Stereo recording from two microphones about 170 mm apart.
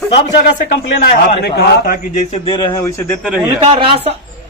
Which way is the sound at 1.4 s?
70° left (ahead or behind).